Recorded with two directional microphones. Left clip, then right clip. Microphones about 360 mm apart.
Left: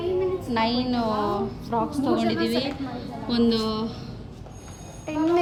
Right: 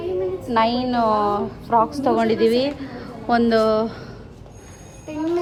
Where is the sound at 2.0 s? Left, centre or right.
Centre.